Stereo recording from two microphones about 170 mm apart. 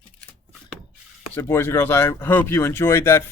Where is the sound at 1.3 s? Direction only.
15° left (ahead or behind).